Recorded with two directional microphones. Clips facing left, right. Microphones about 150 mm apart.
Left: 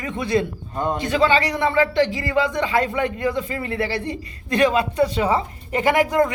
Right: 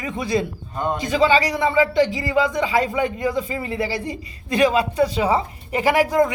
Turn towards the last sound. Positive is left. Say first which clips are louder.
# right 1 dB
turn(degrees=-10)  # may be behind; listen again after turning